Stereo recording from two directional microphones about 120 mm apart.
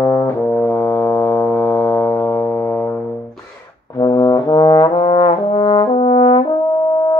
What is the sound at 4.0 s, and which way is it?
Trombone, 30° left (ahead or behind).